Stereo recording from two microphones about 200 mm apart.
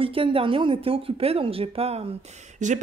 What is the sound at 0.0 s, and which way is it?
A woman's voice, 25° right (ahead or behind).